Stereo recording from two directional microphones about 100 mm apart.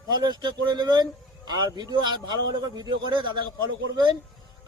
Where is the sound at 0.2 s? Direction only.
45° right (ahead or behind).